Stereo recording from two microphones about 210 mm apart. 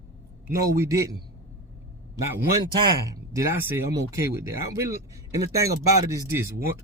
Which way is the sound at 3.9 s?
15° right (ahead or behind).